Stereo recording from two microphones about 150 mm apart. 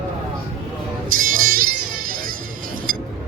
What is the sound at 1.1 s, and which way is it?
Music, 70° right (ahead or behind).